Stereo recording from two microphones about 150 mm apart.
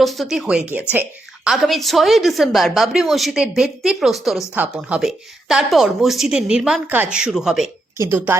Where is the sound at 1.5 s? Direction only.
Centre (ahead or behind).